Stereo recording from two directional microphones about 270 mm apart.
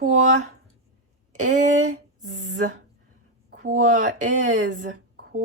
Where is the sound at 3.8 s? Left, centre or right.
Right.